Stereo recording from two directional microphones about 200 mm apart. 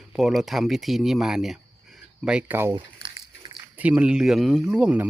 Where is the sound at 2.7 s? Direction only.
25° right (ahead or behind).